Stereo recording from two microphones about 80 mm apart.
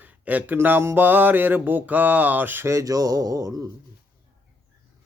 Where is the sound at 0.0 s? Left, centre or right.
Centre; by 3.7 s right.